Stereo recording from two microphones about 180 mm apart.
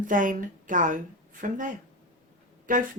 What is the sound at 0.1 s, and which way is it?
Speech, 45° right (ahead or behind).